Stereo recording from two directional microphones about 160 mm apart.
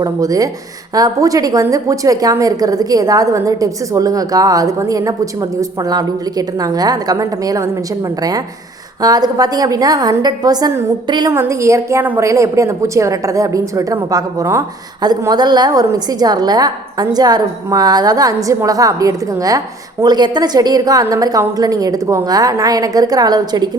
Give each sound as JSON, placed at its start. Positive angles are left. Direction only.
{"t": 0.0, "sound": "a woman's voice", "side_deg": -20}
{"t": 9.0, "sound": "a woman's voice", "side_deg": -25}